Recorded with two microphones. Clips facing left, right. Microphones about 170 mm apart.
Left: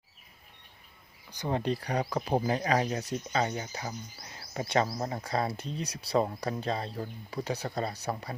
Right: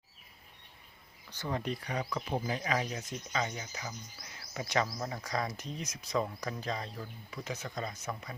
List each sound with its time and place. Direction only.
1.5 s speech: 30° left (ahead or behind)